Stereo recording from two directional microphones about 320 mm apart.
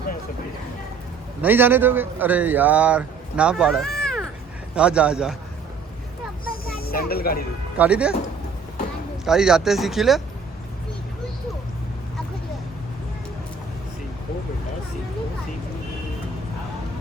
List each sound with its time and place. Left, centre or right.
1.4 s speech: centre
6.7 s speech: left
7.8 s speech: centre
9.2 s speech: centre